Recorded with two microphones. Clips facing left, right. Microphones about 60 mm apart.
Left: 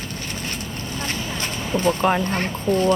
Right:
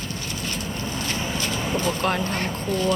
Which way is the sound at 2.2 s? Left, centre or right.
Left.